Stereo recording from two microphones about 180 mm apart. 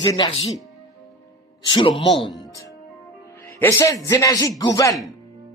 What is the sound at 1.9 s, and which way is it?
Speech, centre (ahead or behind).